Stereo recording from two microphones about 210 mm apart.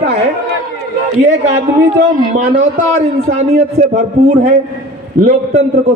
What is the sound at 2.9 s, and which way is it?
Speech, 35° right (ahead or behind).